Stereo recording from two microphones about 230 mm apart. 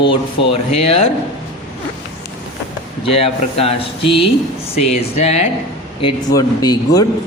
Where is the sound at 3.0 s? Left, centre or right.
Left.